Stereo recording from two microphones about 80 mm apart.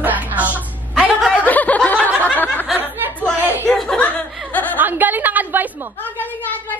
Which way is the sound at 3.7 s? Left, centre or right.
Centre.